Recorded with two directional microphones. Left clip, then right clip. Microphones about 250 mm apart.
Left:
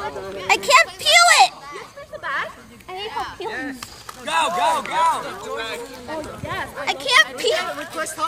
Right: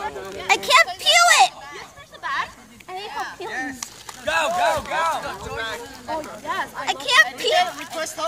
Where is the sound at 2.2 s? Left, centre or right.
Right.